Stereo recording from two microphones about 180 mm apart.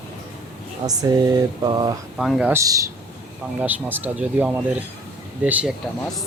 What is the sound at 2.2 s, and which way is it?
Speech, 5° right (ahead or behind).